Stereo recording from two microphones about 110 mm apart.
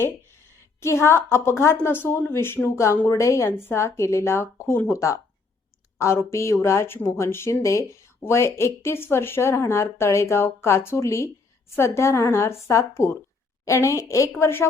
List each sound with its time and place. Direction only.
0.0 s a woman's voice: 25° left (ahead or behind)